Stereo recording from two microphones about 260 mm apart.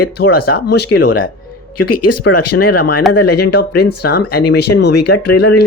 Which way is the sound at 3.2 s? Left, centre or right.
Left.